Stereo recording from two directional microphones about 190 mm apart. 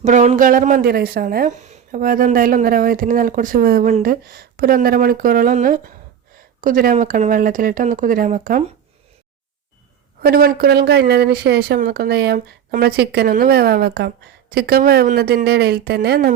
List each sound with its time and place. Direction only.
0.0 s speech: 40° right (ahead or behind)
10.2 s speech: 55° right (ahead or behind)